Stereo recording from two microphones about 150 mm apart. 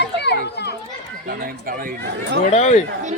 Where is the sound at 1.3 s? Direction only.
75° right (ahead or behind).